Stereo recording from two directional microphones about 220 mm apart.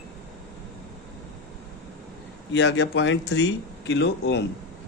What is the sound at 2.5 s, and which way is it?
Speech, 55° left (ahead or behind).